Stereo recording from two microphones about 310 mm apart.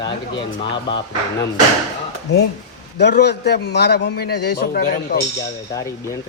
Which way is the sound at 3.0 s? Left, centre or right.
Left.